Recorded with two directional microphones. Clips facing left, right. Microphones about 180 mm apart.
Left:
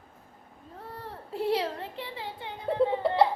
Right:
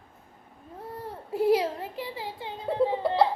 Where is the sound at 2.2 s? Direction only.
20° right (ahead or behind).